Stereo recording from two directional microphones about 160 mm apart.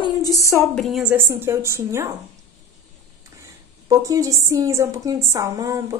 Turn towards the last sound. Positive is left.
turn(degrees=-20)  # may be behind; listen again after turning